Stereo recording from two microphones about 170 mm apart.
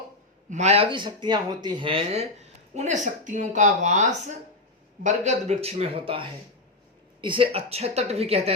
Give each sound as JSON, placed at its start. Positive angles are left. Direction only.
{"t": 0.5, "sound": "speech", "side_deg": -40}
{"t": 5.0, "sound": "a woman's voice", "side_deg": -40}